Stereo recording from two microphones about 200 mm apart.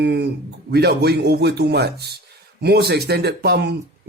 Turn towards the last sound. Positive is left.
turn(degrees=-55)  # may be behind; listen again after turning